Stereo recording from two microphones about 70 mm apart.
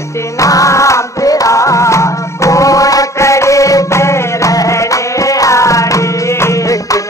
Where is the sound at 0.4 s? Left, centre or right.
Left.